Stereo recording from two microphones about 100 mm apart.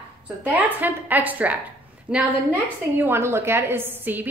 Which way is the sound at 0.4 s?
15° right (ahead or behind).